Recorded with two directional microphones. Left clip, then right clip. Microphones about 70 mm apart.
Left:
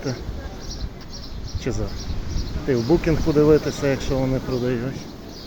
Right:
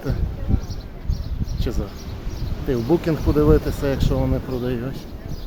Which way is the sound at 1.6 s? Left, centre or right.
Centre.